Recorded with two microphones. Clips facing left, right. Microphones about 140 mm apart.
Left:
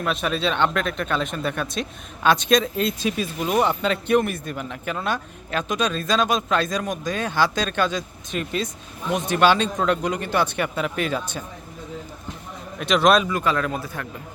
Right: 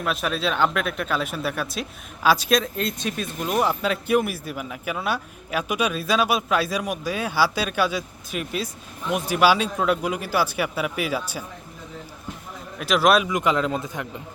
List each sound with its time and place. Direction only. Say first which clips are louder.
0.0 s speech: left 1 dB; centre (ahead or behind)
12.8 s speech: left 1 dB; 5° right (ahead or behind)
13.3 s a man's voice: right 1 dB; 15° right (ahead or behind)